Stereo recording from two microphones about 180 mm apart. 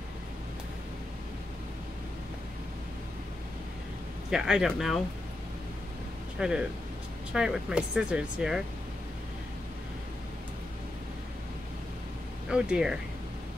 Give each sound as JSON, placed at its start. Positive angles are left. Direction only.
{"t": 4.3, "sound": "speech", "side_deg": -5}
{"t": 6.4, "sound": "speech", "side_deg": -5}
{"t": 12.4, "sound": "speech", "side_deg": -5}